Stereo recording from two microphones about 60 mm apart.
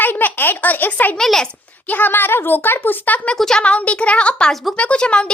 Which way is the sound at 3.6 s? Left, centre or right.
Left.